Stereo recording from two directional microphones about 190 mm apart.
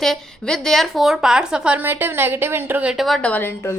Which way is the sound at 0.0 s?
Centre (ahead or behind).